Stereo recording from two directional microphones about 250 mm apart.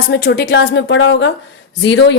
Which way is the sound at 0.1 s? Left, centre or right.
Left.